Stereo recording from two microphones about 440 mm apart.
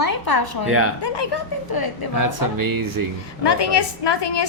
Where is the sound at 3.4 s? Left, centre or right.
Left.